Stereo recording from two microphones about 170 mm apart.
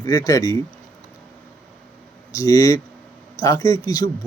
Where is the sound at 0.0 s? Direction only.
20° left (ahead or behind).